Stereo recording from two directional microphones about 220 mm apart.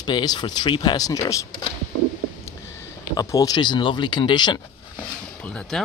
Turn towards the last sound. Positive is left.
turn(degrees=0)  # may be behind; listen again after turning